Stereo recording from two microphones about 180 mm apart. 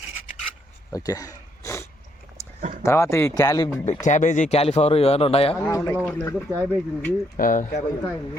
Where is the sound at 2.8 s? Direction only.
15° left (ahead or behind).